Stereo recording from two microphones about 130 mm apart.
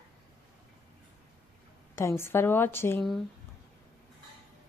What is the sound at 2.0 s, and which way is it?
A woman's voice, 20° left (ahead or behind).